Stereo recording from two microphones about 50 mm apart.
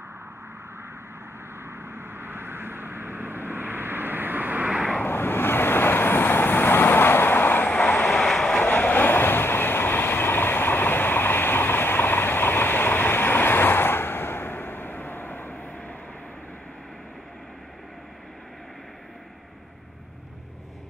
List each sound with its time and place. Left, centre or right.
1.9 s vehicle: right
5.0 s vehicle: left
8.2 s vehicle: centre
8.5 s vehicle: left